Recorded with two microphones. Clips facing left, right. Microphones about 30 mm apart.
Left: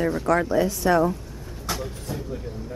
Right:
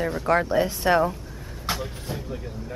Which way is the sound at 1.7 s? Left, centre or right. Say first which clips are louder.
Even; right.